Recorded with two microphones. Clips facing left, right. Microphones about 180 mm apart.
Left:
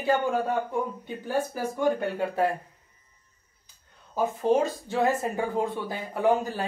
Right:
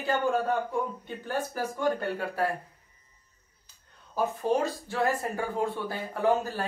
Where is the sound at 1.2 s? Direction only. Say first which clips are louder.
Left 3 dB; 10° left (ahead or behind).